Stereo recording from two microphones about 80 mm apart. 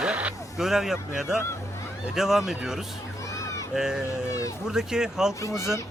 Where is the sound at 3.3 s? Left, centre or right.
Left.